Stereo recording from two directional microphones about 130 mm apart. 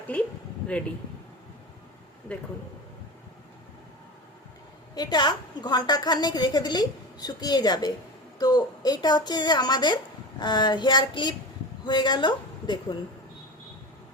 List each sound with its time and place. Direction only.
0.1 s speech: 10° left (ahead or behind)
2.3 s speech: 10° left (ahead or behind)
4.9 s a woman's voice: 30° left (ahead or behind)